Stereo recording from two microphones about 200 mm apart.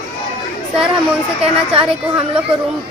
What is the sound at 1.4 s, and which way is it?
Speech, 30° right (ahead or behind).